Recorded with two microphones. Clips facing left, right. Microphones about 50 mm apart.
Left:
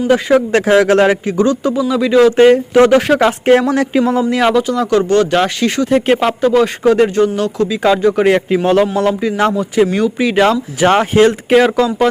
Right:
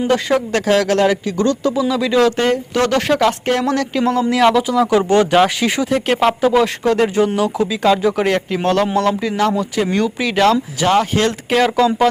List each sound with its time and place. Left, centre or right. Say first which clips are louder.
0.1 s speech: left 6 dB; centre
0.5 s speech: left 4 dB; left
1.4 s speech: left 3 dB; centre
2.3 s speech: left 9 dB; left; by 4.6 s centre
4.6 s speech: left 1 dB; centre
5.3 s speech: even; centre
8.2 s speech: left 5 dB; centre
10.8 s speech: left 3 dB; left
11.1 s speech: left 7 dB; centre